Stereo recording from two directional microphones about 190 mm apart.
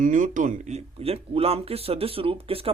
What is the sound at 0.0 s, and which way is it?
Speech, 40° right (ahead or behind).